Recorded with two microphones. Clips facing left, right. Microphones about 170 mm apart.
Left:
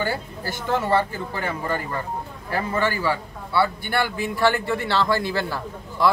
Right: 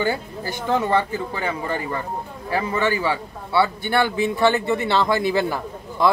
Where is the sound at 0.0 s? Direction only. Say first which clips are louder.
Right 3 dB; 20° right (ahead or behind).